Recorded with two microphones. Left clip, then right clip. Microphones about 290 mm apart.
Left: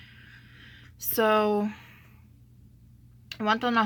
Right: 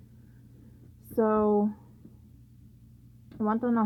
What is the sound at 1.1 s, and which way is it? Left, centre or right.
Speech, left.